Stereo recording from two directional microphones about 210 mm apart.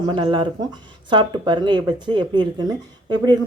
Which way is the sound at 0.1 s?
25° right (ahead or behind).